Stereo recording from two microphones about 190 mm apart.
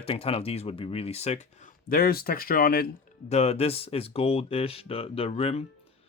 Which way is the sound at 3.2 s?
35° left (ahead or behind).